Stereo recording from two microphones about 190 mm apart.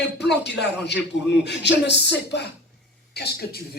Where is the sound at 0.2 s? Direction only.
65° left (ahead or behind).